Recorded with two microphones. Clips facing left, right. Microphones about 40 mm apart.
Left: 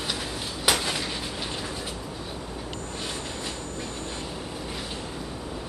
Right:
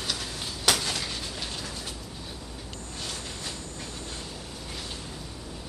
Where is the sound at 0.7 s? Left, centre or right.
Centre.